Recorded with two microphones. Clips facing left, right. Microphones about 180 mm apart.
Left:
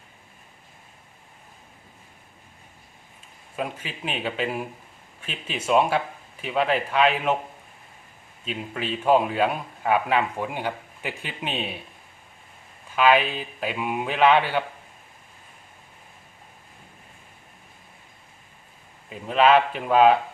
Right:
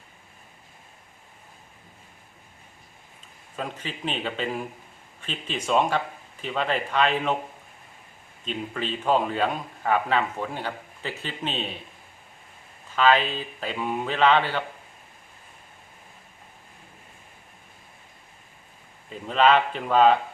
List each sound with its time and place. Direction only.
3.5 s a man's voice: 10° left (ahead or behind)
8.4 s a man's voice: 5° left (ahead or behind)
13.0 s a man's voice: 10° left (ahead or behind)
19.3 s a man's voice: 5° left (ahead or behind)